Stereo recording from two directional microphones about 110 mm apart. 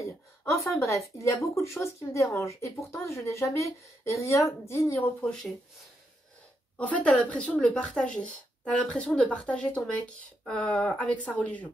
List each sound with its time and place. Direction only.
0.5 s speech: 25° left (ahead or behind); by 5.5 s 10° left (ahead or behind)
6.8 s speech: 15° left (ahead or behind)